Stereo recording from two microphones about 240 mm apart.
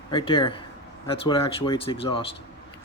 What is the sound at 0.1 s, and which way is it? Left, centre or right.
Speech, left.